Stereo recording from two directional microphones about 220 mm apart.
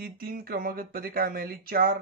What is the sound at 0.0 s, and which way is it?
Speech, 45° right (ahead or behind).